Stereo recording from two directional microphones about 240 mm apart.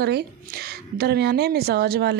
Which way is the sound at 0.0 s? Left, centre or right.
Right.